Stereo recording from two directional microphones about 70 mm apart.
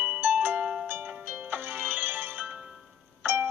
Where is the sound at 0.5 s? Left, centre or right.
Centre.